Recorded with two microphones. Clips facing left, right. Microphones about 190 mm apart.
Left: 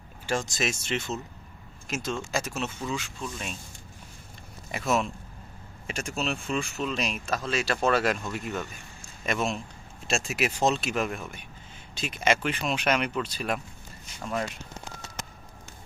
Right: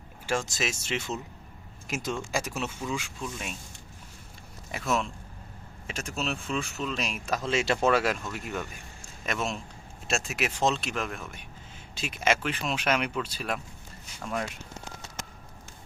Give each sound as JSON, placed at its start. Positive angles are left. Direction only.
{"t": 0.3, "sound": "speech", "side_deg": -5}
{"t": 4.7, "sound": "speech", "side_deg": 0}
{"t": 7.3, "sound": "speech", "side_deg": -20}
{"t": 7.9, "sound": "speech", "side_deg": -5}